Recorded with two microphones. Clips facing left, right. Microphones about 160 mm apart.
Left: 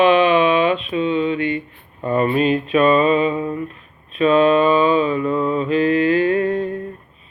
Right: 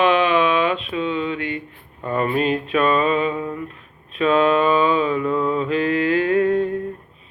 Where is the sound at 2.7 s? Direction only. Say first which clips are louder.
Left 4 dB; 5° left (ahead or behind).